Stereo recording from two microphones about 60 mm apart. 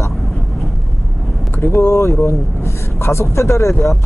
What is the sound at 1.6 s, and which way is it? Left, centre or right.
Speech, left.